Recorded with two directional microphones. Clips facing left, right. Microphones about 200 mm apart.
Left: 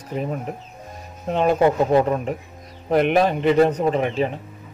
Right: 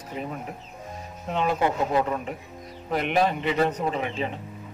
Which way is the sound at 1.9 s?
35° left (ahead or behind).